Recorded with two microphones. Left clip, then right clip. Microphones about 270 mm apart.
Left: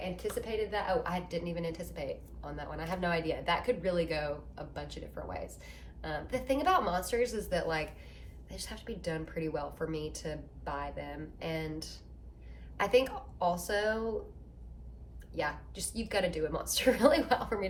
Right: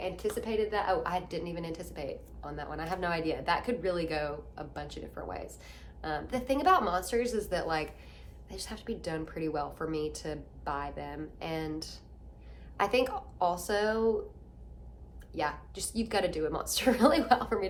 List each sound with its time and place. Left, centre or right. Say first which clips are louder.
0.0 s a woman's voice: right 3 dB; centre
15.3 s a woman's voice: right 2 dB; centre